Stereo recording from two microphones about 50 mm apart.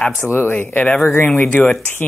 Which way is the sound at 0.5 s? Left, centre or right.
Left.